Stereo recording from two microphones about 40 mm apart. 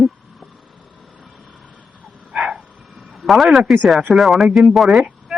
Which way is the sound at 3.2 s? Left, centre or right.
Centre.